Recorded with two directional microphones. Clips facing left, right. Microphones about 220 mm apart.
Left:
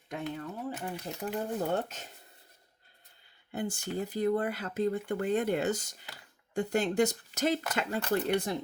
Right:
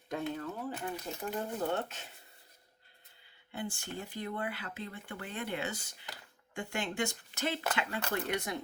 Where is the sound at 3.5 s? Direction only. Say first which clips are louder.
Left 6 dB; 40° left (ahead or behind).